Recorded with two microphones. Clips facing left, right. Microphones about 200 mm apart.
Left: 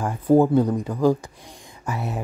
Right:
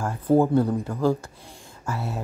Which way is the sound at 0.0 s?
15° left (ahead or behind).